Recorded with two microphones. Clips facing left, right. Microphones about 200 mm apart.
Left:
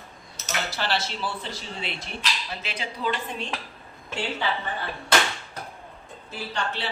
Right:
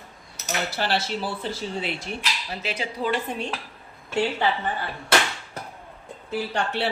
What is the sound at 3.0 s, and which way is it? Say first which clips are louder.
Speech: right 2 dB; 45° right (ahead or behind).